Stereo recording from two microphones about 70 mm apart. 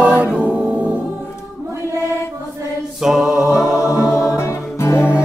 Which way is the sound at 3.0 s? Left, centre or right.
Centre.